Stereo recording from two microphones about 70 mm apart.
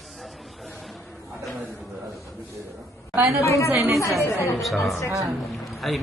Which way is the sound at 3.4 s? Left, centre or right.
Left.